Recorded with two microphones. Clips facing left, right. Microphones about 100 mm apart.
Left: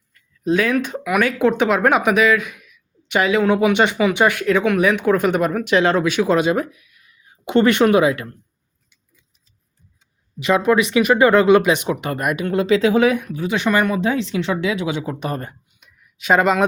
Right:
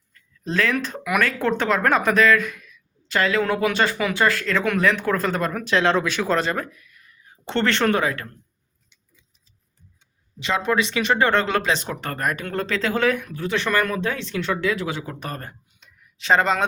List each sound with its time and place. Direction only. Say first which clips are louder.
0.1 s speech: left 9 dB; 10° left (ahead or behind)
10.7 s speech: left 5 dB; 15° left (ahead or behind)
16.1 s speech: left 3 dB; 10° left (ahead or behind)